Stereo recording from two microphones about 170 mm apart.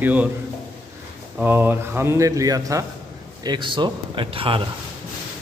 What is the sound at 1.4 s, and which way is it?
Speech, 10° right (ahead or behind).